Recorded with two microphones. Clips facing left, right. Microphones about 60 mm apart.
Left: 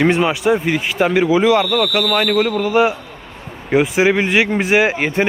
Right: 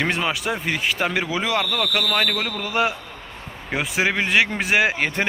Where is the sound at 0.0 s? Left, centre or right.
Centre.